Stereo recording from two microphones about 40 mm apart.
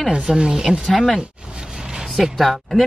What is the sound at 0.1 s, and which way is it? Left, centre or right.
Speech, centre.